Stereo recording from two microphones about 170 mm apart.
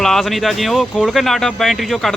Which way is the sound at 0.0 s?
Centre (ahead or behind).